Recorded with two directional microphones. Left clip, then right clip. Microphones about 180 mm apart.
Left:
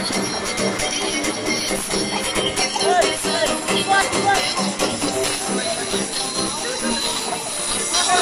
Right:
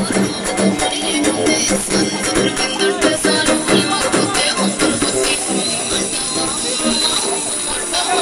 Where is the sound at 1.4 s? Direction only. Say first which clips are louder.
Right 6 dB; 60° right (ahead or behind).